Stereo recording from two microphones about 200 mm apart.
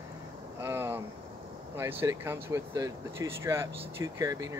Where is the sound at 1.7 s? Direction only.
10° right (ahead or behind).